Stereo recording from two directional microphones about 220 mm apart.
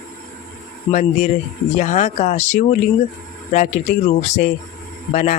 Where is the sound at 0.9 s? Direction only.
35° left (ahead or behind).